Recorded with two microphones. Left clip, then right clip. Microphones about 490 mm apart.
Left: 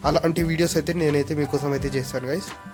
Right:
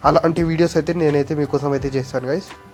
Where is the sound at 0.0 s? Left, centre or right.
Left.